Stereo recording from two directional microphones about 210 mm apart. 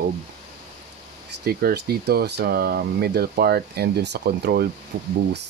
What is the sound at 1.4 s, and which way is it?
Speech, 50° right (ahead or behind).